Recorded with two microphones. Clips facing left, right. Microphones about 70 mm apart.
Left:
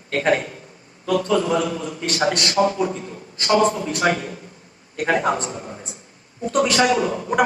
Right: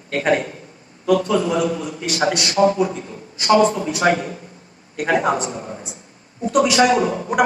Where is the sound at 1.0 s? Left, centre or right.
Right.